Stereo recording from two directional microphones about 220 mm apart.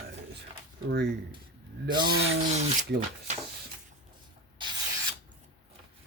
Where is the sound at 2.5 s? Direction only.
30° right (ahead or behind).